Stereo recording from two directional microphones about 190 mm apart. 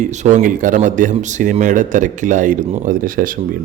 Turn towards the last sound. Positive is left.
turn(degrees=-45)  # may be behind; listen again after turning